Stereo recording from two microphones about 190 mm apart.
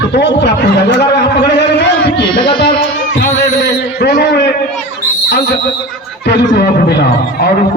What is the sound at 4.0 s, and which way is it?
Speech, 60° left (ahead or behind).